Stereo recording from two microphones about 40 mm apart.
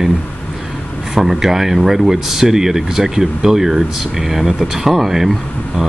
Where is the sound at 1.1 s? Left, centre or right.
Centre.